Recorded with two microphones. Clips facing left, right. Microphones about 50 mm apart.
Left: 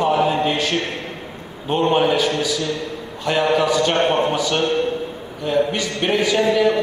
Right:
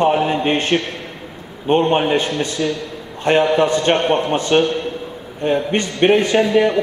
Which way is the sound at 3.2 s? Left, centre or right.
Right.